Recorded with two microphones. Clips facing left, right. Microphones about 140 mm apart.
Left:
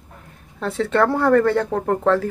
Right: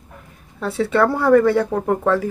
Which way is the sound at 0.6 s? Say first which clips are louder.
Right 1 dB; 5° right (ahead or behind).